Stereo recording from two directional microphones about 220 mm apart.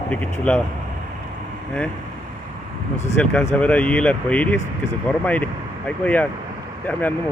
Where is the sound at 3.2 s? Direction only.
5° left (ahead or behind).